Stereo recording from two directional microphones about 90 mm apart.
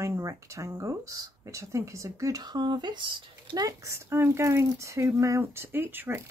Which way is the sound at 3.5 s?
40° right (ahead or behind).